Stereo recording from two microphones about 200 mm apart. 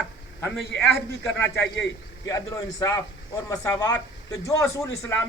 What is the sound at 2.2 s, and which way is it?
A man's voice, 15° left (ahead or behind).